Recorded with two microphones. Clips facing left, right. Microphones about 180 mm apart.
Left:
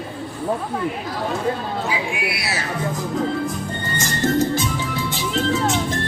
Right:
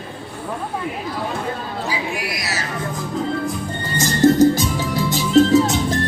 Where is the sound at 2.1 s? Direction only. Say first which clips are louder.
Left 1 dB; 40° right (ahead or behind).